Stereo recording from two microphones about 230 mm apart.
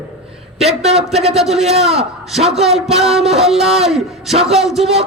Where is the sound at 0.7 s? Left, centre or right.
Right.